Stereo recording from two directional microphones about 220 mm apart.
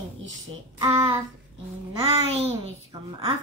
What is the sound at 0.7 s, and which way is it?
Speech, 15° right (ahead or behind).